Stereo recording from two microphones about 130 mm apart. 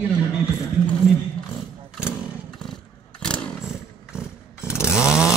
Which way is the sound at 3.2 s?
5° left (ahead or behind).